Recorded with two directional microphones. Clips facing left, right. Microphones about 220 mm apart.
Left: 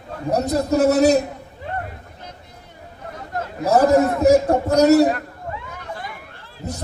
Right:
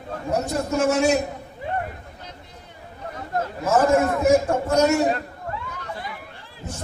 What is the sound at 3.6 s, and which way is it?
A man's voice, 35° left (ahead or behind).